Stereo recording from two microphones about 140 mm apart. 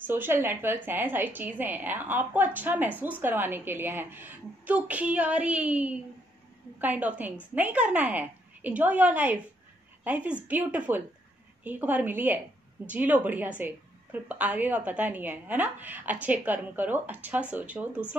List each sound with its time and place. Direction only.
0.0 s a woman's voice: 15° right (ahead or behind)